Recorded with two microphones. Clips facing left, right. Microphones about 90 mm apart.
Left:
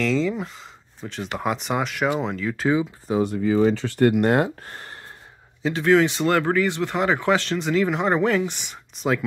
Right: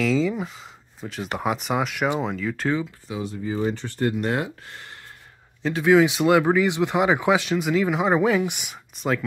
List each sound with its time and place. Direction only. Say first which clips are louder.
0.0 s speech: even; 5° right (ahead or behind)
3.1 s speech: left 8 dB; 50° left (ahead or behind)
3.3 s speech: left 5 dB; 85° left; by 4.9 s 40° left (ahead or behind)
5.6 s speech: right 1 dB; centre (ahead or behind)